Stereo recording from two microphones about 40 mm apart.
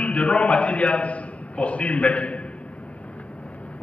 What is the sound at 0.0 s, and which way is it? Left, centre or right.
A man's voice, left.